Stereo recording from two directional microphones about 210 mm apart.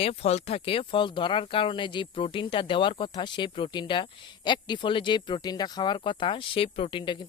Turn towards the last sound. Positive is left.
turn(degrees=20)  # may be behind; listen again after turning